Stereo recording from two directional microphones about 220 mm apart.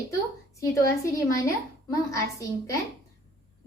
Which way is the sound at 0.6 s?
15° left (ahead or behind).